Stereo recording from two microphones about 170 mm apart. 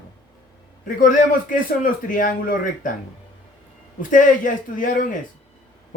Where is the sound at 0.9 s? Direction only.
50° left (ahead or behind).